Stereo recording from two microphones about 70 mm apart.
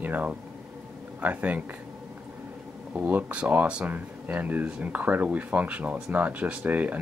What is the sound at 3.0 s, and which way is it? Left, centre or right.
Speech, right.